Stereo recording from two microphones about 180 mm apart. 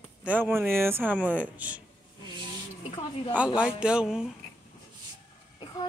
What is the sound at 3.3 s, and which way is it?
Speech, 5° right (ahead or behind).